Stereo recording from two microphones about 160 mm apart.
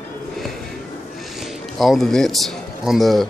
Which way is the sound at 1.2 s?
Centre (ahead or behind).